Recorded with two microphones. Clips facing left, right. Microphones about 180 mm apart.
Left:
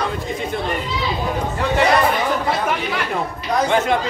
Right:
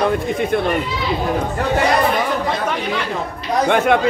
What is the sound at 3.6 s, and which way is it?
Speech, 60° right (ahead or behind).